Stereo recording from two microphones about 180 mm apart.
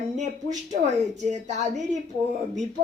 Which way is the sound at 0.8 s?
40° right (ahead or behind).